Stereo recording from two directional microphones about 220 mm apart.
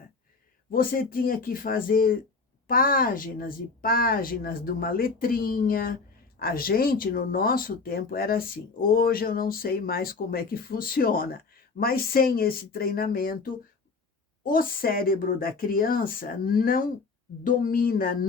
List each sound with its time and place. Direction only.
0.7 s a woman's voice: 40° left (ahead or behind)